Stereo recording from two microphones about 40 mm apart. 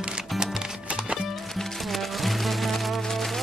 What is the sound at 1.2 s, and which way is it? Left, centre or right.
Music, centre.